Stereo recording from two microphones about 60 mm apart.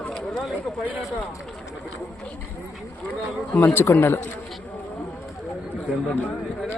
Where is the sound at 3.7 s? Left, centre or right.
Left.